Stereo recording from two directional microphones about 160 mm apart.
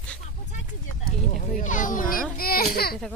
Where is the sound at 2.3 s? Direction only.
70° left (ahead or behind).